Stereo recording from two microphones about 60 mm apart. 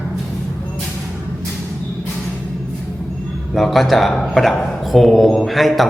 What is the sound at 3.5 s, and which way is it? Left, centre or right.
Speech, centre.